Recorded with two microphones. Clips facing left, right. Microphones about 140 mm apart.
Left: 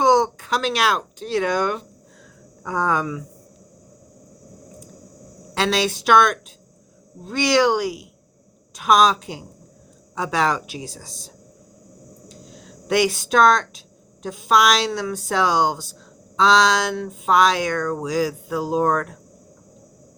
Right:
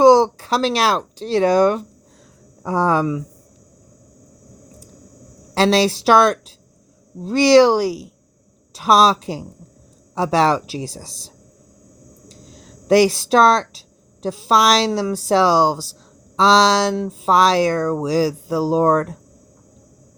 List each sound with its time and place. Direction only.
0.0 s speech: 35° right (ahead or behind)
5.5 s speech: 35° right (ahead or behind)
12.3 s speech: 35° right (ahead or behind)